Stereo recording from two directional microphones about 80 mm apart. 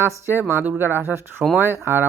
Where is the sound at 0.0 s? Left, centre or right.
Right.